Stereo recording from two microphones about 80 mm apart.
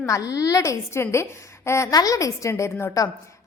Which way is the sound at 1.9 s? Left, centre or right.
Left.